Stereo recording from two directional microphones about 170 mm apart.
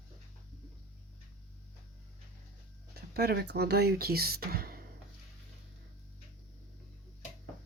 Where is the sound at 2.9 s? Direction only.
65° right (ahead or behind).